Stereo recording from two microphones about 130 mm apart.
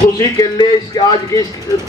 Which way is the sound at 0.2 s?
30° left (ahead or behind).